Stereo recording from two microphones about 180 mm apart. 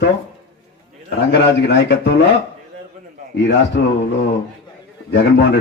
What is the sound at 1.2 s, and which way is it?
A man's voice, 75° left (ahead or behind).